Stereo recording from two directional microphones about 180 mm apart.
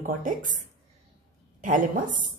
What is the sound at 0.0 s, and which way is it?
Speech, 50° right (ahead or behind).